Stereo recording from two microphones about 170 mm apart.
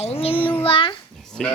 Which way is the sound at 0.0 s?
35° left (ahead or behind).